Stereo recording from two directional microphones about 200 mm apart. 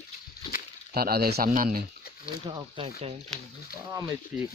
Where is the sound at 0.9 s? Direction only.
50° right (ahead or behind).